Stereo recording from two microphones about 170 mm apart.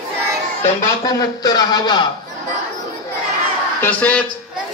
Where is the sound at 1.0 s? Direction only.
20° left (ahead or behind).